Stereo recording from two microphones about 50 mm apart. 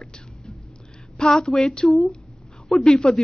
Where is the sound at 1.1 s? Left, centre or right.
Centre.